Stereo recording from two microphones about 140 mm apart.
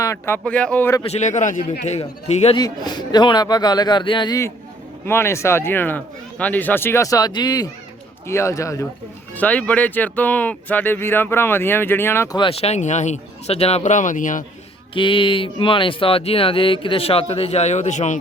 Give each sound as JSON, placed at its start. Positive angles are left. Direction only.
{"t": 0.0, "sound": "speech", "side_deg": 20}
{"t": 0.4, "sound": "speech", "side_deg": 10}
{"t": 1.0, "sound": "a man's voice", "side_deg": 55}
{"t": 2.6, "sound": "speech", "side_deg": 30}
{"t": 5.0, "sound": "speech", "side_deg": 15}
{"t": 9.3, "sound": "speech", "side_deg": 10}
{"t": 12.4, "sound": "speech", "side_deg": 45}
{"t": 14.9, "sound": "speech", "side_deg": 35}